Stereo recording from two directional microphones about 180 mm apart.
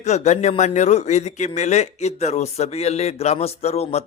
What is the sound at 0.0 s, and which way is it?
Speech, 40° left (ahead or behind).